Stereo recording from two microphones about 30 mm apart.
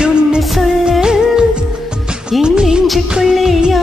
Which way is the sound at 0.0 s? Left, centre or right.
Right.